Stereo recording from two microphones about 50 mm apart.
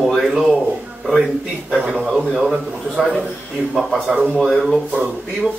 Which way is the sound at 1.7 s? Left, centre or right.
Right.